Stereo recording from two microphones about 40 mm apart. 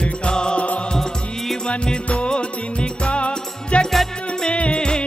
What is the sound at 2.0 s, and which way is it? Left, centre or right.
Music, left.